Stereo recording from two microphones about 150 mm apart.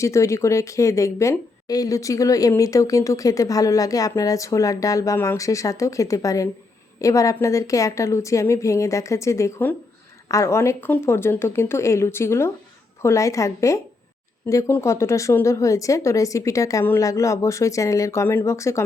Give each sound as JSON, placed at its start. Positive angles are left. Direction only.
{"t": 0.0, "sound": "speech", "side_deg": 20}